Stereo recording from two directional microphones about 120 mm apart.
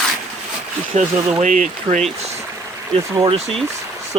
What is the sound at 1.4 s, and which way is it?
Speech, 90° right.